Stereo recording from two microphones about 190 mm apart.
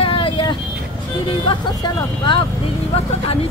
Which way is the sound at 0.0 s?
30° left (ahead or behind).